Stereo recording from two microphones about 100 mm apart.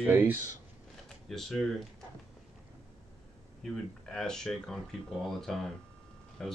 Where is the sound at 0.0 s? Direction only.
20° right (ahead or behind).